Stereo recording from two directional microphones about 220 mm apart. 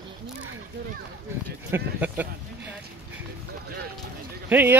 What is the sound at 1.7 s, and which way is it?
Speech, 10° right (ahead or behind).